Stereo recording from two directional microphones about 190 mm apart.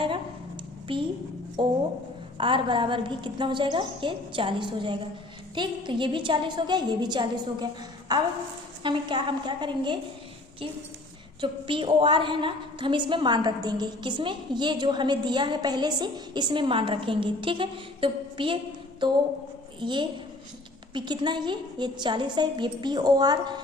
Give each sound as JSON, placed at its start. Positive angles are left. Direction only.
{"t": 1.6, "sound": "a woman's voice", "side_deg": -25}
{"t": 11.3, "sound": "a woman's voice", "side_deg": -25}